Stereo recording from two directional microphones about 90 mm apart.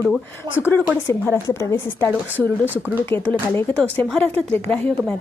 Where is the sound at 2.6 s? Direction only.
20° right (ahead or behind).